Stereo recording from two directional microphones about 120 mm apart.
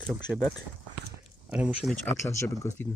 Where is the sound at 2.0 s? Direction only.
25° left (ahead or behind).